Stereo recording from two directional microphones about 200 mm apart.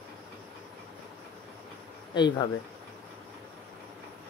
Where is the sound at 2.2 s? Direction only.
20° left (ahead or behind).